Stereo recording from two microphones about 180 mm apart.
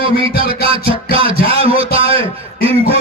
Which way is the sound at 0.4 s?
30° right (ahead or behind).